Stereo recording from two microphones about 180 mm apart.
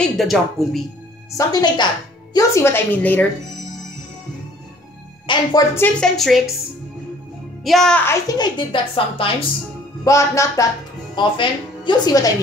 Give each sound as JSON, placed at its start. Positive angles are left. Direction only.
{"t": 0.0, "sound": "a woman's voice", "side_deg": 0}
{"t": 1.3, "sound": "a woman's voice", "side_deg": 20}
{"t": 5.2, "sound": "a woman's voice", "side_deg": 25}
{"t": 5.9, "sound": "a woman's voice", "side_deg": 0}
{"t": 7.6, "sound": "a woman's voice", "side_deg": 0}
{"t": 10.0, "sound": "a woman's voice", "side_deg": 15}